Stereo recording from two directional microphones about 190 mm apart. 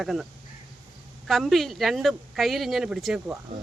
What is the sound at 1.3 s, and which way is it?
Speech, centre (ahead or behind).